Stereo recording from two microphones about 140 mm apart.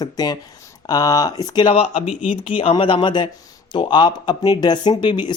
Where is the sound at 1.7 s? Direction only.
40° left (ahead or behind).